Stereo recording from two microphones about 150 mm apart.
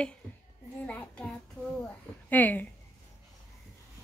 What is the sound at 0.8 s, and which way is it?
Child singing, 5° left (ahead or behind).